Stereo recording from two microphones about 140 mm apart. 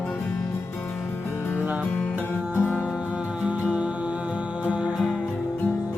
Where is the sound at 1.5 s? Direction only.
10° right (ahead or behind).